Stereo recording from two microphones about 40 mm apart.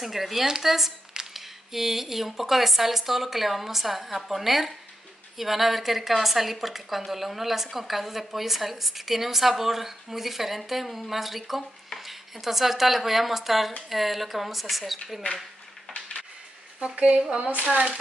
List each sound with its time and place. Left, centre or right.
0.0 s speech: centre
16.9 s speech: right